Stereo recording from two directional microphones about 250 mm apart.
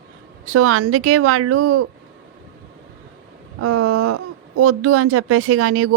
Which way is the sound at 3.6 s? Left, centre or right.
Right.